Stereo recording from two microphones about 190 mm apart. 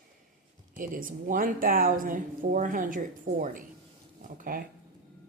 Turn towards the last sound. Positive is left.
turn(degrees=-45)  # may be behind; listen again after turning